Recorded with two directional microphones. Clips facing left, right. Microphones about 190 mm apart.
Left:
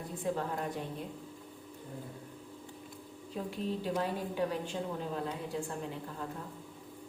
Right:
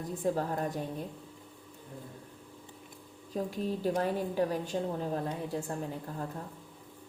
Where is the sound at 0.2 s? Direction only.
40° right (ahead or behind).